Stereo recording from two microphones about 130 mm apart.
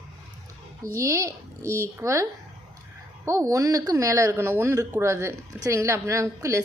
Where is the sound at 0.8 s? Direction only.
20° right (ahead or behind).